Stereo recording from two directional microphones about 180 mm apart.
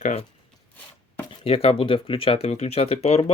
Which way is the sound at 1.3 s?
30° left (ahead or behind).